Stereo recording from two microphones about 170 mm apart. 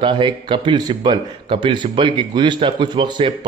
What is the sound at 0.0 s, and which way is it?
A man's voice, 30° right (ahead or behind).